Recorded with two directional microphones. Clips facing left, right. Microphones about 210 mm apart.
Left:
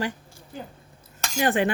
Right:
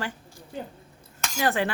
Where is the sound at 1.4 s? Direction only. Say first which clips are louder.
Left 3 dB; 20° left (ahead or behind).